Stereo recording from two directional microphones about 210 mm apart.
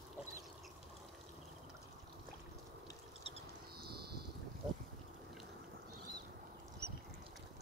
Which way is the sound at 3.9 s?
50° right (ahead or behind).